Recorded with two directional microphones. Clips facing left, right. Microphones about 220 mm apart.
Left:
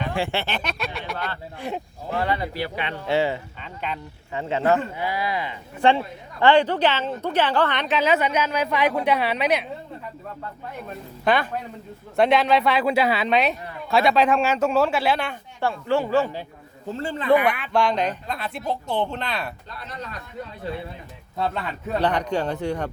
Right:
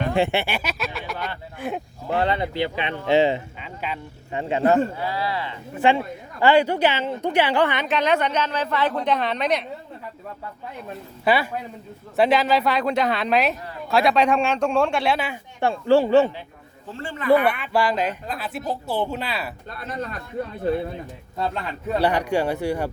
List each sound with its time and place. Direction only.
0.1 s a woman's voice: 20° right (ahead or behind); by 1.8 s centre (ahead or behind)
2.1 s speech: 25° right (ahead or behind)
3.6 s speech: 5° right (ahead or behind)
4.3 s speech: 20° right (ahead or behind)
4.9 s speech: 15° left (ahead or behind)
5.7 s a woman's voice: 5° right (ahead or behind)
11.3 s a woman's voice: 5° right (ahead or behind)
15.6 s speech: 30° right (ahead or behind)
16.9 s a man's voice: 40° left (ahead or behind)
17.4 s a woman's voice: 5° right (ahead or behind)
21.9 s speech: 10° right (ahead or behind)